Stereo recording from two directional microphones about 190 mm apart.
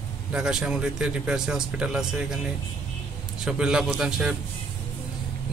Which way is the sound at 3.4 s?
5° right (ahead or behind).